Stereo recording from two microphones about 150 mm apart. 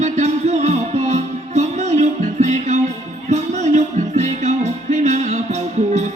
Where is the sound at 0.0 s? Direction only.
50° right (ahead or behind).